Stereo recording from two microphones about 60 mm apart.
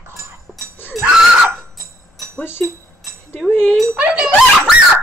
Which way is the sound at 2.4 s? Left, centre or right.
Left.